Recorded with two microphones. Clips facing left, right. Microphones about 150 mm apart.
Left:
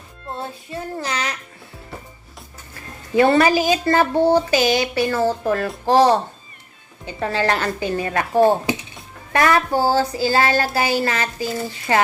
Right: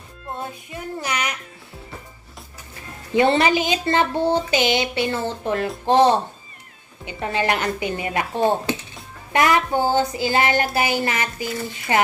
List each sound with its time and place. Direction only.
0.7 s child singing: 15° right (ahead or behind)
3.2 s speech: 20° right (ahead or behind)
7.2 s a woman's voice: 20° right (ahead or behind)
8.4 s speech: 10° left (ahead or behind)
9.3 s speech: 20° right (ahead or behind)